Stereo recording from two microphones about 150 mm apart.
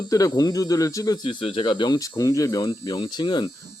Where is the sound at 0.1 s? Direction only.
25° left (ahead or behind).